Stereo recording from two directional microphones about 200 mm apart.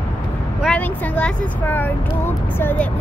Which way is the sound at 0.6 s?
5° left (ahead or behind).